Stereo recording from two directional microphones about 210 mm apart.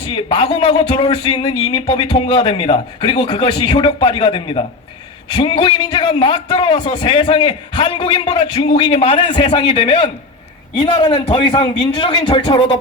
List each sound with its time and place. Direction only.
0.0 s a man's voice: 25° left (ahead or behind)